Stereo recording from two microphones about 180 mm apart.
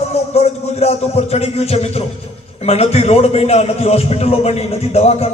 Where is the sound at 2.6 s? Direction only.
35° left (ahead or behind).